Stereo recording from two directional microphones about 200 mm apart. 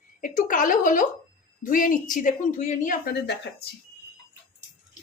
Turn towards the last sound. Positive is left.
turn(degrees=55)  # may be behind; listen again after turning